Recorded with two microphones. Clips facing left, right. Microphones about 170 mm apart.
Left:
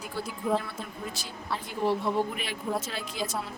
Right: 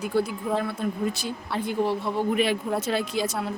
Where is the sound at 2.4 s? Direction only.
70° right (ahead or behind).